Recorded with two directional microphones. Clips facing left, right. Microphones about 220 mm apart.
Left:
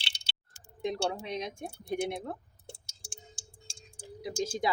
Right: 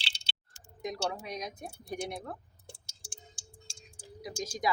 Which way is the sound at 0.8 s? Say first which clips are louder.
Left 3 dB; 25° left (ahead or behind).